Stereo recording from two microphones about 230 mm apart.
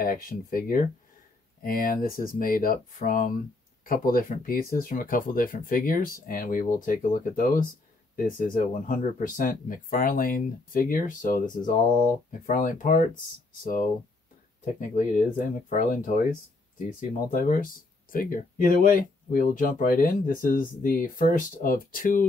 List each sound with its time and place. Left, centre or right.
0.0 s speech: left
14.6 s speech: left
17.3 s speech: left